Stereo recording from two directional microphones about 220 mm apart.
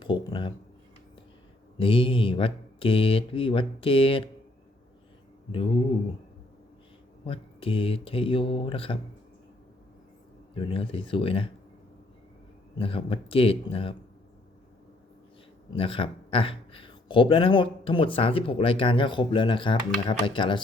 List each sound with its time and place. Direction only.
0.0 s speech: 20° left (ahead or behind)
1.8 s speech: 25° left (ahead or behind)
5.5 s speech: 25° left (ahead or behind)
7.3 s speech: 25° left (ahead or behind)
10.5 s speech: 25° left (ahead or behind)
12.8 s speech: 25° left (ahead or behind)
15.7 s speech: 25° left (ahead or behind)